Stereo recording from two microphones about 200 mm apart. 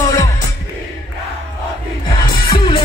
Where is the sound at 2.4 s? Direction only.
25° left (ahead or behind).